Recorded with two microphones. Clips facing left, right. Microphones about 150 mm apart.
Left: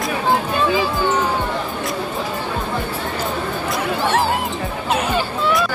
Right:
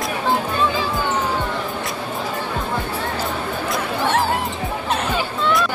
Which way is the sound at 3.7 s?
Centre (ahead or behind).